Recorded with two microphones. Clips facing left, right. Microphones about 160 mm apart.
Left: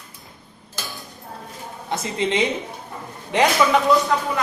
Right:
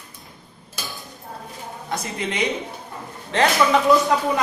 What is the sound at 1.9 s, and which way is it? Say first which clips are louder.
Speech: left 5 dB; 25° left (ahead or behind).